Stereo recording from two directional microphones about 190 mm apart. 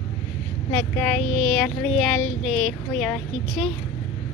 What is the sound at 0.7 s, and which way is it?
Speech, 10° left (ahead or behind).